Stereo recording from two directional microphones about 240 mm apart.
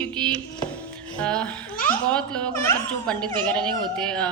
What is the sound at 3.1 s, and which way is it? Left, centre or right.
Music, centre.